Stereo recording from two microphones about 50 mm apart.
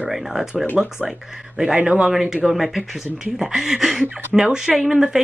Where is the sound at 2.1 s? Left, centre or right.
Centre.